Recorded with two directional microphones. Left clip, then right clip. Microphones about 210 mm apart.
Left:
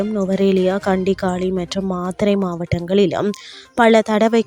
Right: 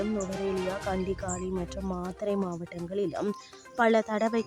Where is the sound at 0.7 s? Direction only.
35° left (ahead or behind).